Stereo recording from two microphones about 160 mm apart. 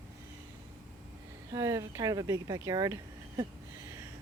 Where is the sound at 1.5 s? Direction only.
20° right (ahead or behind).